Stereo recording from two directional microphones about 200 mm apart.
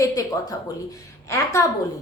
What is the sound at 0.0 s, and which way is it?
A woman's voice, 20° left (ahead or behind).